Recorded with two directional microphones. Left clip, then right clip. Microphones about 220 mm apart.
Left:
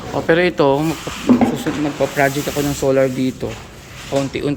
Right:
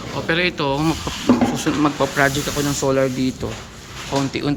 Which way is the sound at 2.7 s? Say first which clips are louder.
Left 4 dB; 10° left (ahead or behind).